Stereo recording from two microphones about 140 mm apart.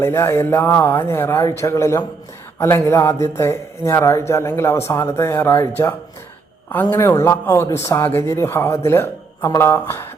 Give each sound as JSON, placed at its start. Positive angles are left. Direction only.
{"t": 0.0, "sound": "speech", "side_deg": 20}
{"t": 6.9, "sound": "speech", "side_deg": 20}